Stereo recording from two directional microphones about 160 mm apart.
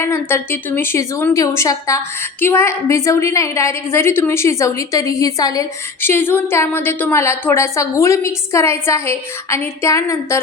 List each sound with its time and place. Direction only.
0.0 s a woman's voice: 15° left (ahead or behind)